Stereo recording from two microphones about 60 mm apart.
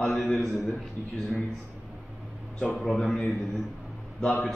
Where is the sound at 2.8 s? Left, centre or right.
Centre.